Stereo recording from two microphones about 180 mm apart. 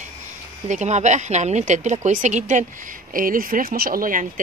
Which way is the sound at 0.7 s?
40° right (ahead or behind).